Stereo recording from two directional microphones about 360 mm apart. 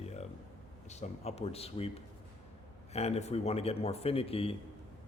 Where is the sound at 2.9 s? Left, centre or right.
Centre.